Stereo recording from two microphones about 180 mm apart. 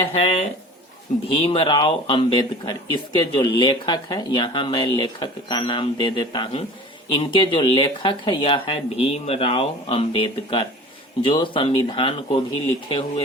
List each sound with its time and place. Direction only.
0.1 s speech: 30° left (ahead or behind)